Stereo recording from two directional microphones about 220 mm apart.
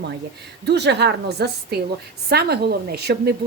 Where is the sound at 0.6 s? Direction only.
50° right (ahead or behind).